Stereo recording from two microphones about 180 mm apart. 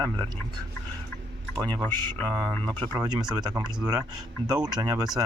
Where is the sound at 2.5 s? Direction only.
10° left (ahead or behind).